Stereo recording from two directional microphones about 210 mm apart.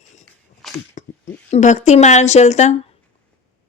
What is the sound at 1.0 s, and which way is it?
A woman's voice, 35° left (ahead or behind).